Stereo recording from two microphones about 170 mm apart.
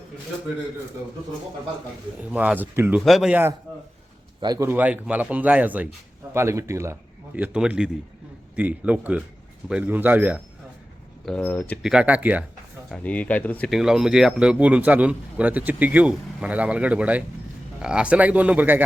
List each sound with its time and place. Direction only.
2.3 s speech: 10° right (ahead or behind)
3.0 s speech: centre (ahead or behind)
4.4 s a man's voice: 25° right (ahead or behind)
4.7 s speech: 10° right (ahead or behind)
11.3 s speech: 5° left (ahead or behind)
11.8 s speech: 5° right (ahead or behind)
12.9 s speech: 10° left (ahead or behind); by 18.8 s 10° right (ahead or behind)